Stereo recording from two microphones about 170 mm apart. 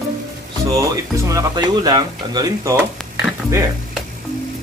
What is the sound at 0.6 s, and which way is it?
Speech, 20° right (ahead or behind).